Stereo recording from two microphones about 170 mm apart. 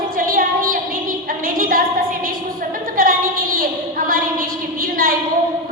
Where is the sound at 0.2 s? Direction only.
55° right (ahead or behind).